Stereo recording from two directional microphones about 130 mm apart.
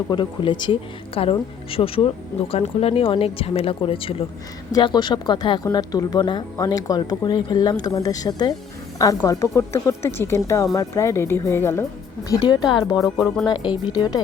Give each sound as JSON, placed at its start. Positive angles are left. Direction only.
{"t": 0.1, "sound": "speech", "side_deg": 35}
{"t": 4.7, "sound": "a woman's voice", "side_deg": 35}
{"t": 12.4, "sound": "speech", "side_deg": 35}
{"t": 13.1, "sound": "speech", "side_deg": 5}
{"t": 13.5, "sound": "speech", "side_deg": 35}